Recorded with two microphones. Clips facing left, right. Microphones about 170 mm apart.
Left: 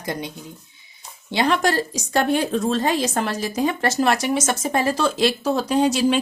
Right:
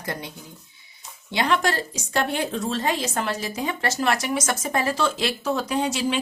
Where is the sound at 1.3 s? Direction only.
35° left (ahead or behind).